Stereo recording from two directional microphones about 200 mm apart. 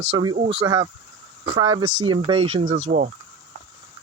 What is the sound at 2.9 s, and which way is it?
Speech, 45° right (ahead or behind).